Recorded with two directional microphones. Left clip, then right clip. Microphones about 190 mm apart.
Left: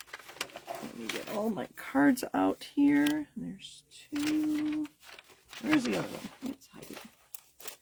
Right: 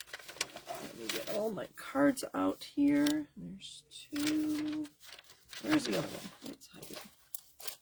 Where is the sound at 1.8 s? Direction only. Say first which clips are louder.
Left 3 dB; 45° left (ahead or behind).